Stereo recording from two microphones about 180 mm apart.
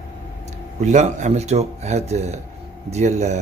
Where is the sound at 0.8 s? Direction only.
40° right (ahead or behind).